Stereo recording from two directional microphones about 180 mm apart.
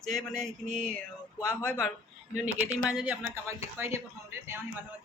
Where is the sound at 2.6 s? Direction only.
5° right (ahead or behind).